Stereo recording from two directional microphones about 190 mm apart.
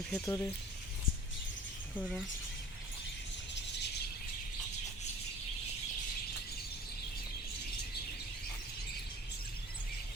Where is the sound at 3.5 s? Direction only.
65° left (ahead or behind).